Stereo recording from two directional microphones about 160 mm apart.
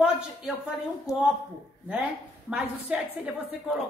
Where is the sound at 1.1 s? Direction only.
20° left (ahead or behind).